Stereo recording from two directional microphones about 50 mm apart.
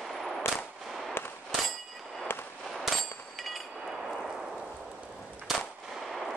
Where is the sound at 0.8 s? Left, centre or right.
Centre.